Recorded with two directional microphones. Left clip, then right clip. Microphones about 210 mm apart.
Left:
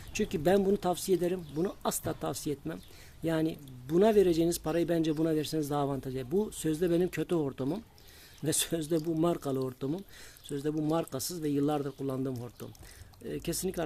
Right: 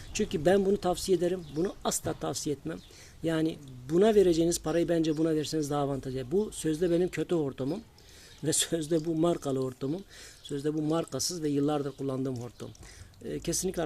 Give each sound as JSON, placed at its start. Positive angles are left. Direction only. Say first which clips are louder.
{"t": 0.1, "sound": "speech", "louder": "right 2 dB", "side_deg": 5}